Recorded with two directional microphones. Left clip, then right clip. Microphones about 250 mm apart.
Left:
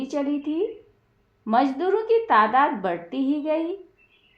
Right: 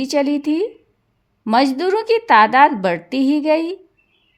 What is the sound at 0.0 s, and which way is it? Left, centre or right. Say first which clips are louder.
A woman's voice: right 8 dB; right.